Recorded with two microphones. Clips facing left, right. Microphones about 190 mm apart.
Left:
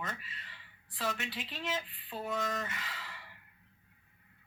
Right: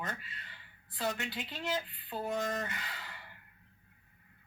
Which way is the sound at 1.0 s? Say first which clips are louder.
Right 2 dB; 40° right (ahead or behind).